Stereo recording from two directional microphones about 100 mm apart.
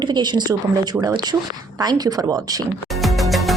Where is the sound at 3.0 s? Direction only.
Centre (ahead or behind).